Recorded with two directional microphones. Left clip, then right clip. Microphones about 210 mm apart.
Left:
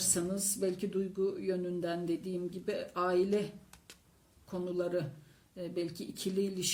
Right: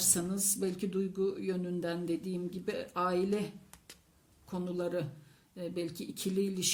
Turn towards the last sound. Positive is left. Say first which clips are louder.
# right 1 dB
turn(degrees=-25)  # may be behind; listen again after turning